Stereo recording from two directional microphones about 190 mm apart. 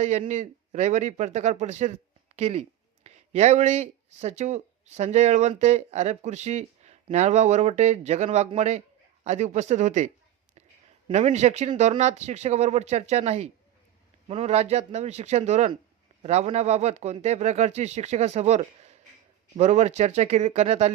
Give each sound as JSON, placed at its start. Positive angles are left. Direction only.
{"t": 0.0, "sound": "speech", "side_deg": -40}
{"t": 11.1, "sound": "speech", "side_deg": -35}